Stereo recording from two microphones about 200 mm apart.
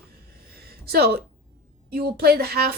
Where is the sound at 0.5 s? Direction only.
50° right (ahead or behind).